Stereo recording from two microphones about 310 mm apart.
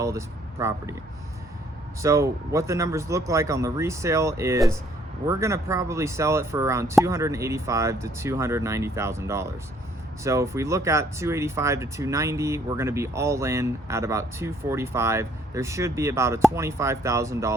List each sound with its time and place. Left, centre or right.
0.0 s speech: centre
2.0 s speech: centre